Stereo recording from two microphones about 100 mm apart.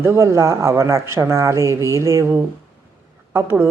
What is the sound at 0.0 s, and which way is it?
A woman's voice, 25° right (ahead or behind).